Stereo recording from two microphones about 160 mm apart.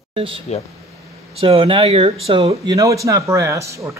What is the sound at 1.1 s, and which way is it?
Speech, 35° right (ahead or behind).